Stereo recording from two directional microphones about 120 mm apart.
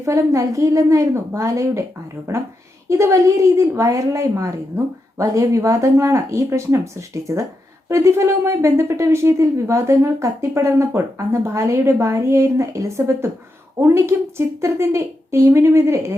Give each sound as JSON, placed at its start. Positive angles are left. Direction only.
{"t": 0.0, "sound": "speech", "side_deg": -25}